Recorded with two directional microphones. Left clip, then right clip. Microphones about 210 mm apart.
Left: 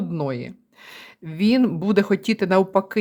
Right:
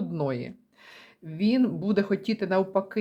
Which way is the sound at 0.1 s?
10° left (ahead or behind).